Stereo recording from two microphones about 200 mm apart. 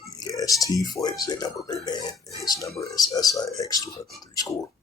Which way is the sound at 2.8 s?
20° left (ahead or behind).